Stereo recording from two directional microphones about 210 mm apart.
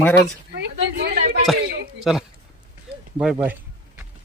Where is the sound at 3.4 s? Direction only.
10° right (ahead or behind).